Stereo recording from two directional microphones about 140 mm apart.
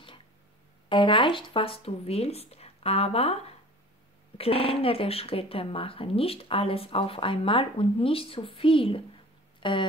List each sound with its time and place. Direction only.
0.8 s speech: 35° left (ahead or behind)